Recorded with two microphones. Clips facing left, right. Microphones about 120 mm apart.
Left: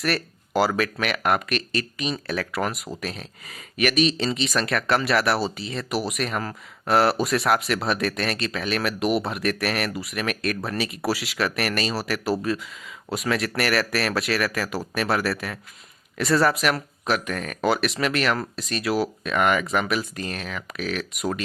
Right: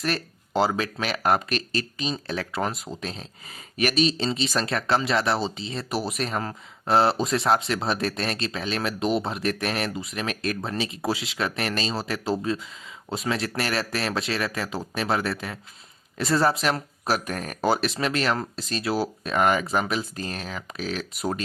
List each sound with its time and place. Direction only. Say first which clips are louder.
0.0 s speech: left 2 dB; 25° right (ahead or behind)